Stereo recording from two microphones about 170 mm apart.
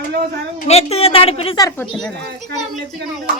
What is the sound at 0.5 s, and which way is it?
A woman's voice, 40° left (ahead or behind).